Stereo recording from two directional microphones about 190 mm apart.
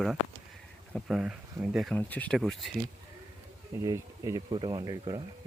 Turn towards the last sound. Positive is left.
turn(degrees=-20)  # may be behind; listen again after turning